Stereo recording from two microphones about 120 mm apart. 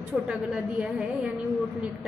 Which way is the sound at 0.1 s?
5° right (ahead or behind).